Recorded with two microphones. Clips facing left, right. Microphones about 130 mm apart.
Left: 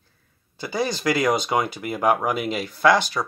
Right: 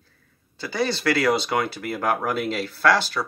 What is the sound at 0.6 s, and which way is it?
Speech, 20° left (ahead or behind).